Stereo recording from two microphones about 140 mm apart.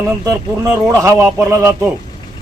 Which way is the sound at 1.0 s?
20° right (ahead or behind).